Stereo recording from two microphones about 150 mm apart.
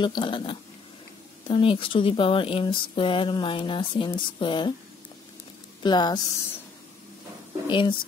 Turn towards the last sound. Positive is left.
turn(degrees=30)  # may be behind; listen again after turning